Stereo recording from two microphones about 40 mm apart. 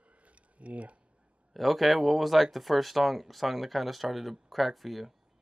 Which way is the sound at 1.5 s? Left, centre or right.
Centre.